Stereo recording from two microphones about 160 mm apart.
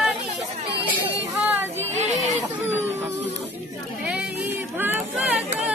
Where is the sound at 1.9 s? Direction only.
45° right (ahead or behind).